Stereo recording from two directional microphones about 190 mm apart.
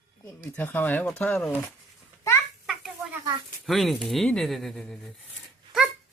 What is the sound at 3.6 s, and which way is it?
Speech, centre (ahead or behind).